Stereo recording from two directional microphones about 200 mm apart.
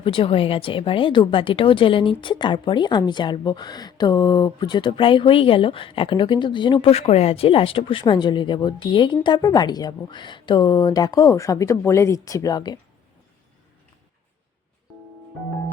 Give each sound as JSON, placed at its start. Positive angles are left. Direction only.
{"t": 0.0, "sound": "speech", "side_deg": 25}